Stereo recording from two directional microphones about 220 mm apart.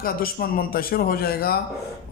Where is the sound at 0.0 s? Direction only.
40° left (ahead or behind).